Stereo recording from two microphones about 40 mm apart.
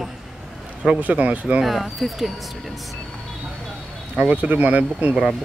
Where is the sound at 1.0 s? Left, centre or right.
Right.